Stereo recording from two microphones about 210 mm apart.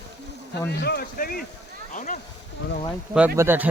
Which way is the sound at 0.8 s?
50° left (ahead or behind).